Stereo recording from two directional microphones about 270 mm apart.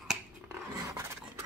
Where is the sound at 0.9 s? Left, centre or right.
Centre.